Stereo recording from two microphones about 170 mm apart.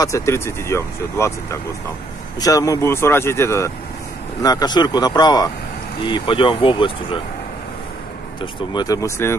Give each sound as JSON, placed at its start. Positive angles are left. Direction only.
{"t": 0.0, "sound": "speech", "side_deg": 15}
{"t": 8.7, "sound": "speech", "side_deg": 20}